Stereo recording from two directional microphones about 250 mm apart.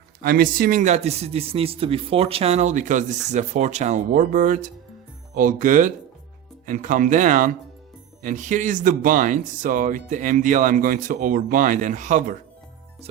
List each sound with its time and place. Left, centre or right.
0.2 s speech: right